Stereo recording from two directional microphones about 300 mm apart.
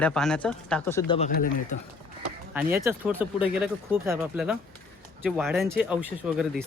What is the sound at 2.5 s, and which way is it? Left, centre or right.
Speech, centre.